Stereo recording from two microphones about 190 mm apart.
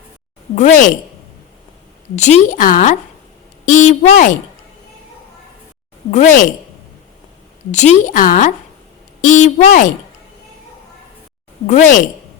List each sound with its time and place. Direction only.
0.5 s a woman's voice: 40° left (ahead or behind)
2.1 s a woman's voice: 40° left (ahead or behind)
6.1 s a woman's voice: 40° left (ahead or behind)
7.7 s a woman's voice: 40° left (ahead or behind)
11.6 s a woman's voice: 40° left (ahead or behind)